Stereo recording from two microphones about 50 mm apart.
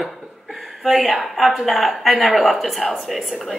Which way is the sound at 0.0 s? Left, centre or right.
Centre.